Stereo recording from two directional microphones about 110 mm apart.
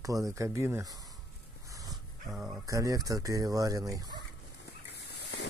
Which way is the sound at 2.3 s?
10° right (ahead or behind).